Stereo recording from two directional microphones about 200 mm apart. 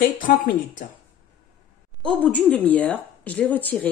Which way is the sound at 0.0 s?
40° left (ahead or behind).